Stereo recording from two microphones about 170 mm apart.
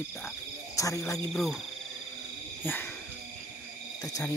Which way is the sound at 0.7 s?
20° left (ahead or behind).